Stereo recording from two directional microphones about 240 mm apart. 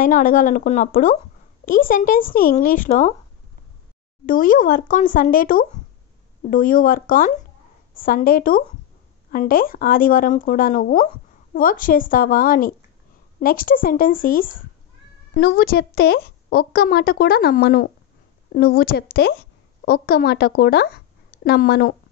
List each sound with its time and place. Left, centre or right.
0.0 s a woman's voice: left
4.3 s a woman's voice: left